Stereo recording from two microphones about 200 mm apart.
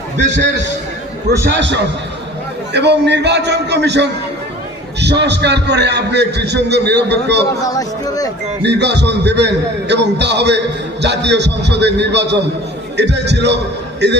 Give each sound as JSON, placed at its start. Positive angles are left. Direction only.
{"t": 0.2, "sound": "a man's voice", "side_deg": -35}
{"t": 1.5, "sound": "a man's voice", "side_deg": -60}
{"t": 7.6, "sound": "speech", "side_deg": 15}
{"t": 8.6, "sound": "a man's voice", "side_deg": -60}